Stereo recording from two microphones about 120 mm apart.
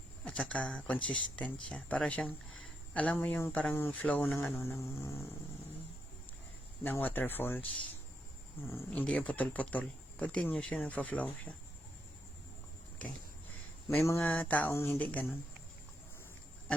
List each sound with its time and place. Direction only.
0.3 s speech: 10° left (ahead or behind)
4.5 s insect: 20° left (ahead or behind)
6.8 s speech: 15° left (ahead or behind)
8.7 s speech: 15° left (ahead or behind)
13.9 s insect: 20° left (ahead or behind)
14.3 s speech: 10° left (ahead or behind)
14.7 s insect: 25° left (ahead or behind)
14.9 s speech: 15° left (ahead or behind)